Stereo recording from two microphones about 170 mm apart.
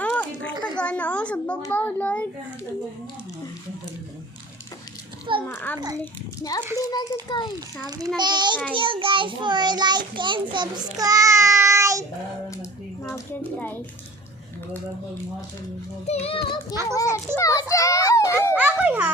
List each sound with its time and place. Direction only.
0.0 s a sound: 5° left (ahead or behind)
1.7 s a child's voice: 10° left (ahead or behind)
5.4 s a child's voice: 10° left (ahead or behind)
5.7 s child singing: 20° right (ahead or behind)
6.7 s a child's voice: 25° left (ahead or behind)
7.9 s child singing: 25° right (ahead or behind)
13.1 s speech: 10° left (ahead or behind)
16.0 s a child's voice: 35° left (ahead or behind)
17.0 s a sound: 20° left (ahead or behind)
18.5 s babbling: 10° right (ahead or behind)